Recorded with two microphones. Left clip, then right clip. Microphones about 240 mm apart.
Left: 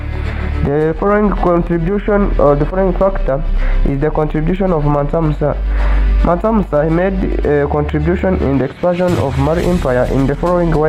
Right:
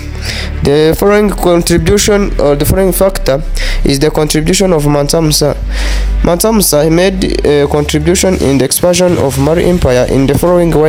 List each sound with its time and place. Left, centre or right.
0.7 s speech: right